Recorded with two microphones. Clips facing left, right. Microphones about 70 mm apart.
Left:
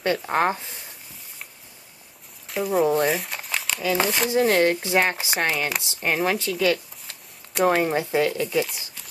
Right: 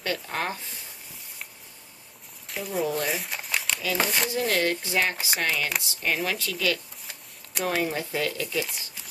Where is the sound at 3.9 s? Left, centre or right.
Centre.